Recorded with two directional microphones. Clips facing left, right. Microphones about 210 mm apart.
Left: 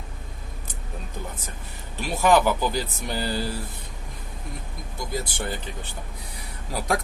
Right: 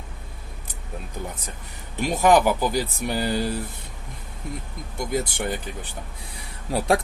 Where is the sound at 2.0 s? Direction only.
15° right (ahead or behind).